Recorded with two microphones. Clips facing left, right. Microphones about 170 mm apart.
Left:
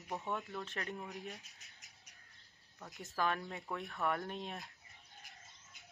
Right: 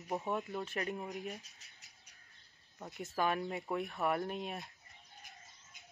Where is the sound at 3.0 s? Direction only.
10° right (ahead or behind).